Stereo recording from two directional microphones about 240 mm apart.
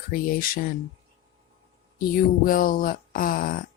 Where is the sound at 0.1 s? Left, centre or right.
Left.